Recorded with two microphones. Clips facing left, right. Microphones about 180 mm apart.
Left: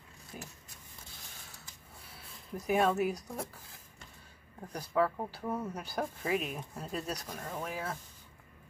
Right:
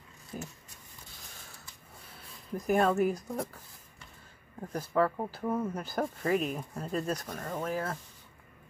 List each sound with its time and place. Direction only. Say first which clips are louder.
0.3 s speech: right 6 dB; 45° right (ahead or behind)
2.6 s speech: right 3 dB; 5° left (ahead or behind)
4.7 s speech: right 2 dB; 5° left (ahead or behind)
5.1 s speech: right 4 dB; 10° right (ahead or behind)
5.8 s speech: right 3 dB; 5° left (ahead or behind)